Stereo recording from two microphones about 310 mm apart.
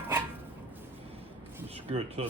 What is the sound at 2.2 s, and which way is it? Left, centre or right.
Speech, right.